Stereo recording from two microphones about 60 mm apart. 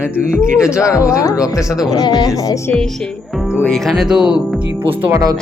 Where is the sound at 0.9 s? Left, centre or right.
Left.